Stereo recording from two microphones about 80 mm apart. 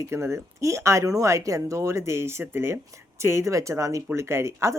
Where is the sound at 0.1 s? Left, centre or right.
Right.